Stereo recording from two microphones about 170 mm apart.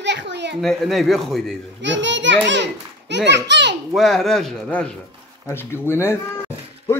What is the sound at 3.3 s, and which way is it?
Speech, 90° right.